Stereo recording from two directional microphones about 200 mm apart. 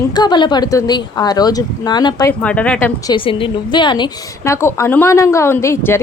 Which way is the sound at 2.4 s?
5° left (ahead or behind).